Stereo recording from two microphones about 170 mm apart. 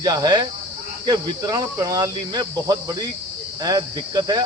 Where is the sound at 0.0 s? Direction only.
25° right (ahead or behind).